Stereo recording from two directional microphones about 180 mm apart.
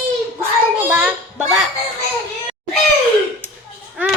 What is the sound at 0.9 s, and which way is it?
Speech, 5° right (ahead or behind).